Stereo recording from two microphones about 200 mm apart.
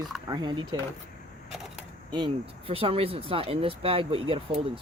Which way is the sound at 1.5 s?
Centre (ahead or behind).